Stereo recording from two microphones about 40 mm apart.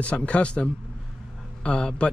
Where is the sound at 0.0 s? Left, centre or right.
Left.